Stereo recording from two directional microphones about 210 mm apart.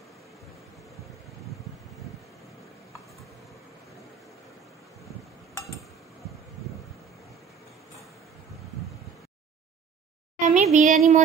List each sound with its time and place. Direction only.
10.4 s speech: 35° right (ahead or behind)